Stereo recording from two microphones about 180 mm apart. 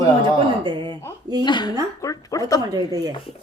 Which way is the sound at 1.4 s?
25° left (ahead or behind).